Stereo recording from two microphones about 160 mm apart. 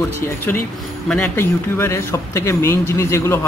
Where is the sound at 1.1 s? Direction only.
10° left (ahead or behind).